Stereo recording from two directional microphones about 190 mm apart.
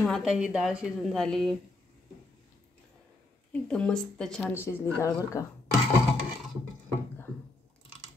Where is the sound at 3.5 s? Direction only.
5° left (ahead or behind).